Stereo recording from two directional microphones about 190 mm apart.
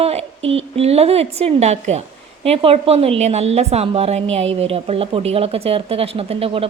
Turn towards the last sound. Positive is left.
turn(degrees=-30)  # may be behind; listen again after turning